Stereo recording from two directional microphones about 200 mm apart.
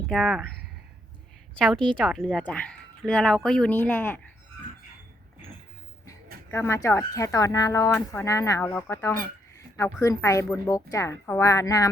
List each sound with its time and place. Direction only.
0.1 s speech: centre (ahead or behind)
1.5 s speech: 5° left (ahead or behind)
6.5 s a woman's voice: 15° left (ahead or behind)